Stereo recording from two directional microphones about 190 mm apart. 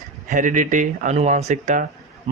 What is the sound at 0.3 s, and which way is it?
Speech, 45° right (ahead or behind).